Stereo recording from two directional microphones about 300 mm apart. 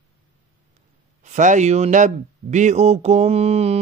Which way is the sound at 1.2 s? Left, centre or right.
Right.